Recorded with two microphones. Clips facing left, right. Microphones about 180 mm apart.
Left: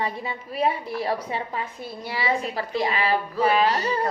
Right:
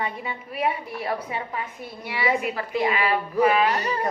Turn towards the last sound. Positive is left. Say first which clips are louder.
# right 1 dB
turn(degrees=30)  # may be behind; listen again after turning